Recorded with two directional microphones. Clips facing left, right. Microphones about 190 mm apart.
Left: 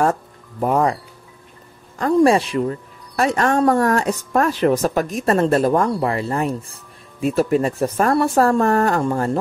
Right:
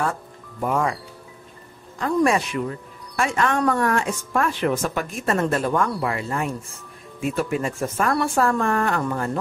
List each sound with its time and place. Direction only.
0.0 s music: 40° left (ahead or behind)
2.1 s a woman's voice: 30° left (ahead or behind)